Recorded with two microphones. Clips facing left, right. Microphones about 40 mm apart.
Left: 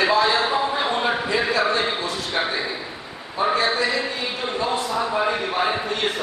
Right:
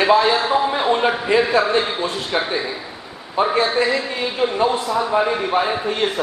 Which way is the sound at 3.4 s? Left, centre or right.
Right.